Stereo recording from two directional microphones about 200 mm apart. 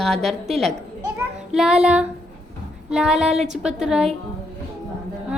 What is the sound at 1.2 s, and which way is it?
Child singing, centre (ahead or behind).